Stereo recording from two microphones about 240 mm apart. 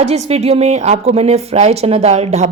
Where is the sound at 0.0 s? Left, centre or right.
Right.